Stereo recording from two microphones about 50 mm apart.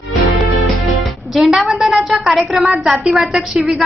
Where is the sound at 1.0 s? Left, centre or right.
Centre.